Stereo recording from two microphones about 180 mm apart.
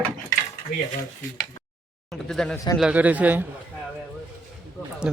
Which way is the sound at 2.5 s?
15° left (ahead or behind).